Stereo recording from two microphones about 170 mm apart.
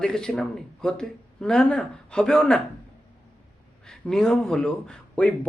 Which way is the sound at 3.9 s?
5° left (ahead or behind).